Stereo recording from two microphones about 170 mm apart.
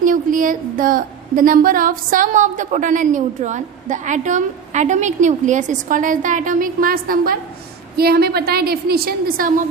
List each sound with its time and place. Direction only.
0.0 s a woman's voice: 50° right (ahead or behind)